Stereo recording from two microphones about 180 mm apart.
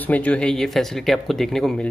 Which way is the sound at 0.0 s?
10° left (ahead or behind).